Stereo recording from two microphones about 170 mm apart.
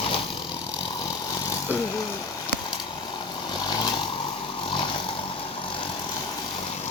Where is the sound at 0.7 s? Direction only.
25° left (ahead or behind).